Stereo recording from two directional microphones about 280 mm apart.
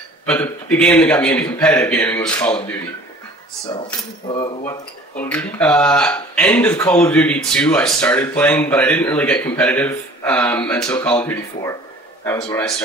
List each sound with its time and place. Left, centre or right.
0.3 s speech: centre
3.7 s speech: centre
5.1 s speech: centre